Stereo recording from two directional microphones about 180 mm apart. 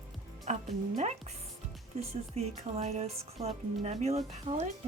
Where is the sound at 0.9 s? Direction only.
40° right (ahead or behind).